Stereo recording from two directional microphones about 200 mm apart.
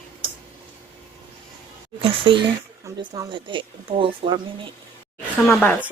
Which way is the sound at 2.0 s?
25° right (ahead or behind).